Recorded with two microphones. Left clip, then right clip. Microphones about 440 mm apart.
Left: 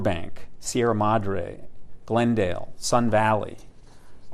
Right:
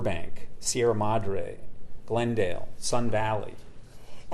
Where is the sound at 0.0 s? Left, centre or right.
Left.